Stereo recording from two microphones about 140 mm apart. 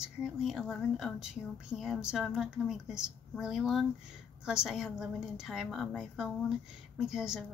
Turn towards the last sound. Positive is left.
turn(degrees=-5)  # may be behind; listen again after turning